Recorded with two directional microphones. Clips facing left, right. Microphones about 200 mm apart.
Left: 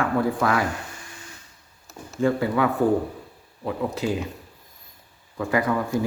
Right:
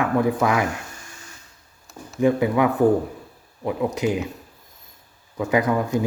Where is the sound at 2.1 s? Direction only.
20° right (ahead or behind).